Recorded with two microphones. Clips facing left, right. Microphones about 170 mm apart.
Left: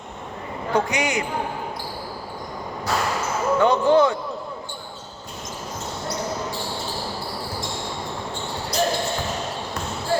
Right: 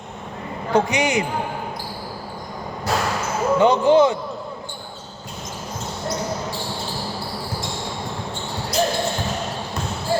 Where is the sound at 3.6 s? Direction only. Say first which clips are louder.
Right 2 dB; 20° right (ahead or behind).